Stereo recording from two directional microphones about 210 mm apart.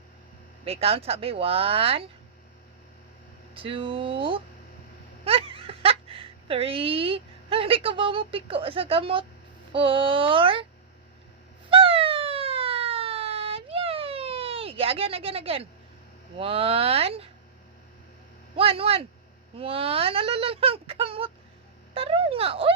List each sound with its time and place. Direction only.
0.6 s speech: 30° right (ahead or behind)
3.5 s speech: 25° right (ahead or behind)
11.7 s siren: 25° right (ahead or behind)
16.4 s speech: 25° right (ahead or behind)
18.5 s speech: 25° right (ahead or behind)